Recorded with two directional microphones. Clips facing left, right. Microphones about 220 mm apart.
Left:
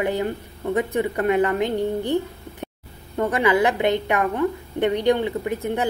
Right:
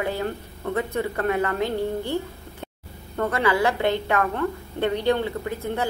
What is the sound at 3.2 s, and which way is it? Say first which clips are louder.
Speech: left 3 dB; 15° left (ahead or behind).